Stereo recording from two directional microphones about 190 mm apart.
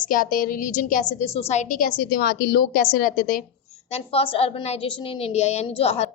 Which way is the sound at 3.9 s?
30° left (ahead or behind).